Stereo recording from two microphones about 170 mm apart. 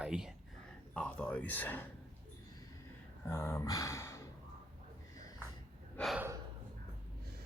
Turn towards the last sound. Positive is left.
turn(degrees=0)  # may be behind; listen again after turning